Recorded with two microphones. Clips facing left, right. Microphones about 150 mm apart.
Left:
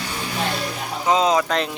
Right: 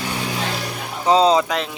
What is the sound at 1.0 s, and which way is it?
Speech, 30° right (ahead or behind).